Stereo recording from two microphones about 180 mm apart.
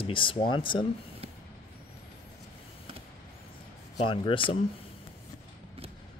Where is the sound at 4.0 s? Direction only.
30° left (ahead or behind).